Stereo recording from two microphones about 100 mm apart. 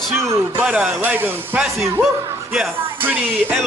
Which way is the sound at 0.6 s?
5° right (ahead or behind).